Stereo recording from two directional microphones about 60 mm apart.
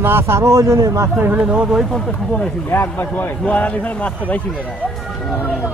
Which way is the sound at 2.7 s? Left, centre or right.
Left.